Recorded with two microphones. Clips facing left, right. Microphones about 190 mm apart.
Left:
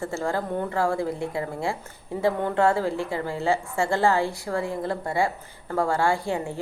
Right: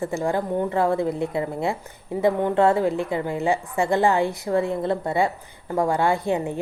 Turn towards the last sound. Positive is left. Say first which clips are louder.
# right 3 dB
turn(degrees=-20)  # may be behind; listen again after turning